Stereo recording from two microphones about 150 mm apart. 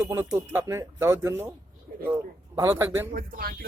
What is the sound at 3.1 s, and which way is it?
Speech, 70° right (ahead or behind).